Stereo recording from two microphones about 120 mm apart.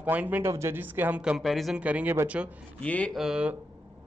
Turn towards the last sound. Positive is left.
turn(degrees=-5)  # may be behind; listen again after turning